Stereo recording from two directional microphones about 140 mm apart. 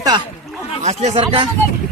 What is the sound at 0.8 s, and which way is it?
Speech, 45° right (ahead or behind).